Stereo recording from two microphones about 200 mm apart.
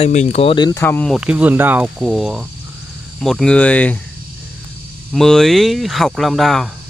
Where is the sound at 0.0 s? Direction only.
35° left (ahead or behind).